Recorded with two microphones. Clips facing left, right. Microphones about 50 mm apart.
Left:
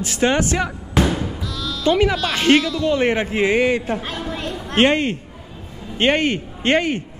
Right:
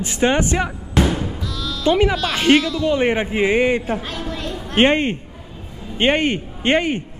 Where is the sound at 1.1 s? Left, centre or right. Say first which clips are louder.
Even; centre.